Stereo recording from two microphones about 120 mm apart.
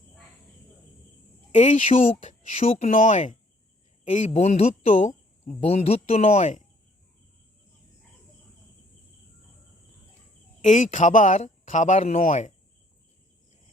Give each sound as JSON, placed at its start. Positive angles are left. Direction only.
{"t": 1.5, "sound": "speech", "side_deg": 75}
{"t": 2.2, "sound": "speech", "side_deg": 90}
{"t": 2.6, "sound": "speech", "side_deg": 55}
{"t": 4.4, "sound": "speech", "side_deg": 65}
{"t": 10.6, "sound": "speech", "side_deg": 90}